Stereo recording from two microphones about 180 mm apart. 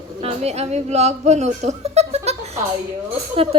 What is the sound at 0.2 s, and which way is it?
A woman's voice, 35° right (ahead or behind).